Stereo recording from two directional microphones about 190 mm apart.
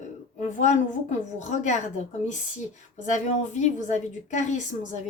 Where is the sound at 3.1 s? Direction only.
40° left (ahead or behind).